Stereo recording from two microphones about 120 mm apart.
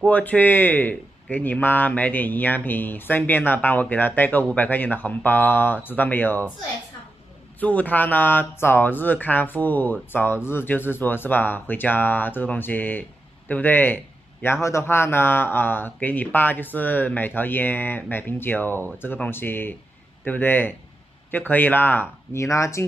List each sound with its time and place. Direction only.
0.0 s speech: 15° left (ahead or behind)
7.6 s speech: 15° left (ahead or behind)